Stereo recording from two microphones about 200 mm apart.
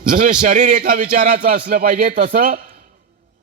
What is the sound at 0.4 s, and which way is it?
A man's voice, 40° right (ahead or behind).